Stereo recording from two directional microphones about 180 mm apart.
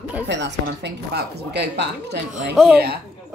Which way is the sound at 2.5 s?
Centre (ahead or behind).